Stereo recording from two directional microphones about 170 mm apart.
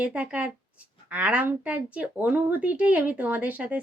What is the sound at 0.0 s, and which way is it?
Speech, 5° right (ahead or behind).